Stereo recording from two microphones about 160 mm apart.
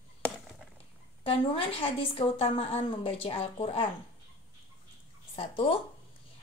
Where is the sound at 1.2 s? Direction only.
35° left (ahead or behind).